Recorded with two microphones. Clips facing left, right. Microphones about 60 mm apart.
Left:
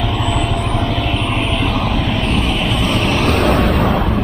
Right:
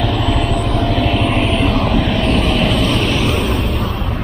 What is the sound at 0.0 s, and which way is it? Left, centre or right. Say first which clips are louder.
Vehicle: right 1 dB; centre.